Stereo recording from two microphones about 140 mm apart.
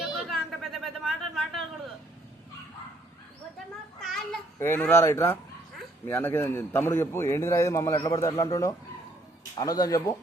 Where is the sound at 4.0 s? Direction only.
Centre (ahead or behind).